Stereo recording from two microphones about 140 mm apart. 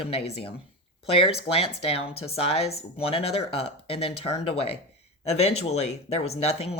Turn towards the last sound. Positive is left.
turn(degrees=45)  # may be behind; listen again after turning